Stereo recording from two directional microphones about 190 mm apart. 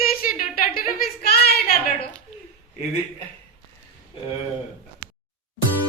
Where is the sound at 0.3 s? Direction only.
50° left (ahead or behind).